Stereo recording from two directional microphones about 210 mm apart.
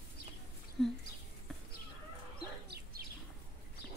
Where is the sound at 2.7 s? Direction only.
45° right (ahead or behind).